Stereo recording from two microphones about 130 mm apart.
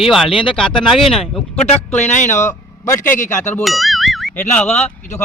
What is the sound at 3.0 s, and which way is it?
Speech, 90° left.